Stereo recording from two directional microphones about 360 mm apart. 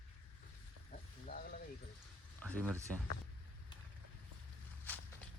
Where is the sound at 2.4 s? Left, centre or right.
Centre.